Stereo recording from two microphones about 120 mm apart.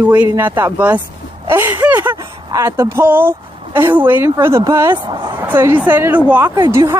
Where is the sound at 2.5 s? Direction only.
25° right (ahead or behind).